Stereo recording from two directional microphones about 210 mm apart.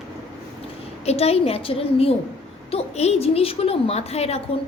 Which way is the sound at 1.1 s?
30° left (ahead or behind).